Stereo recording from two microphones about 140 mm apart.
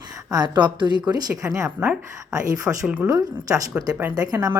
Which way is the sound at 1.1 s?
20° right (ahead or behind).